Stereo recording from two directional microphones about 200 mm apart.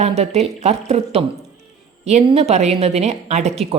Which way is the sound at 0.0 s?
30° right (ahead or behind).